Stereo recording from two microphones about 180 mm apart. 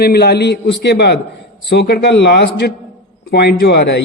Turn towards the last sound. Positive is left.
turn(degrees=65)  # may be behind; listen again after turning